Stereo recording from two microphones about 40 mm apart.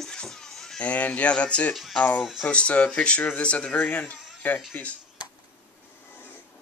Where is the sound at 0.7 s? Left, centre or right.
Left.